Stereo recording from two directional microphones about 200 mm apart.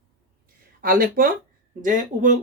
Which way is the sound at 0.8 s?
45° right (ahead or behind).